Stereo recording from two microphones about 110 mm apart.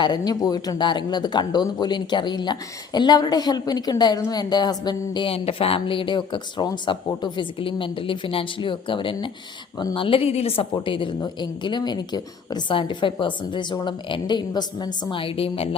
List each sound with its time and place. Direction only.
0.0 s speech: 40° left (ahead or behind)
5.3 s speech: 60° left (ahead or behind)